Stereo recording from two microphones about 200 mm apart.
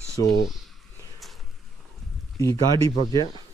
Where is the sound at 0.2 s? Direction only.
20° left (ahead or behind).